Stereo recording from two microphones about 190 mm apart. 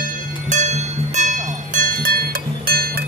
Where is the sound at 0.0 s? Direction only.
40° right (ahead or behind).